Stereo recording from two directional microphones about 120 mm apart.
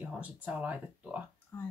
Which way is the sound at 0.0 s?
10° right (ahead or behind).